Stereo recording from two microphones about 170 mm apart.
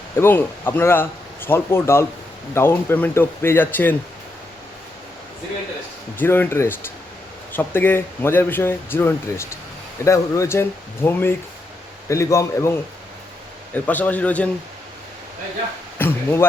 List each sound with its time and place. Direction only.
0.2 s speech: 15° left (ahead or behind)
6.1 s speech: 10° left (ahead or behind)
13.7 s speech: 10° left (ahead or behind)
16.0 s speech: 15° left (ahead or behind)